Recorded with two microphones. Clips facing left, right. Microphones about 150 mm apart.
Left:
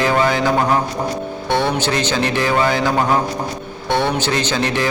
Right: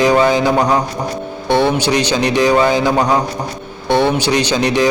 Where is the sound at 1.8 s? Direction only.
15° right (ahead or behind).